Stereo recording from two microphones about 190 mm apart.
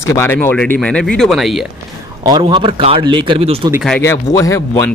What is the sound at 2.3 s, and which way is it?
A man's voice, 25° right (ahead or behind).